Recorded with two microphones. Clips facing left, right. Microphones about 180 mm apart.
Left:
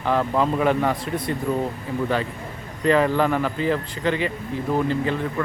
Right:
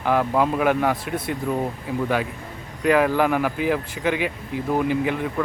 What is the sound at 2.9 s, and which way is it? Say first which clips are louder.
Speech: even; 10° right (ahead or behind).